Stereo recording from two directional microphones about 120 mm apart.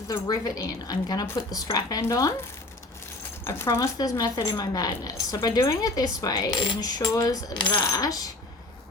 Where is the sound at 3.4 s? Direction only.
20° left (ahead or behind).